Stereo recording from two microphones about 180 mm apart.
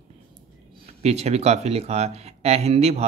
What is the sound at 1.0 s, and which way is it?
Speech, 35° right (ahead or behind).